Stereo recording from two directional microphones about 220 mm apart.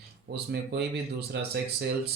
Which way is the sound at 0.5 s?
50° right (ahead or behind).